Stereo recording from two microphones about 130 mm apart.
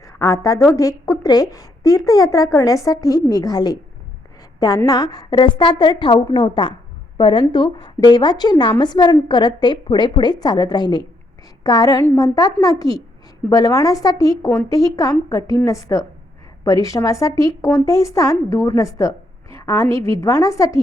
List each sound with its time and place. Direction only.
0.0 s a woman's voice: 30° left (ahead or behind)
4.9 s a woman's voice: 30° left (ahead or behind)